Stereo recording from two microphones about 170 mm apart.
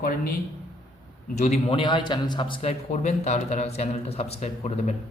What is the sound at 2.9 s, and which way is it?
Speech, 45° left (ahead or behind).